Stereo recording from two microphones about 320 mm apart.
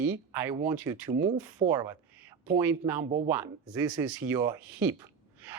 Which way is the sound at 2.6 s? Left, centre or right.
Centre.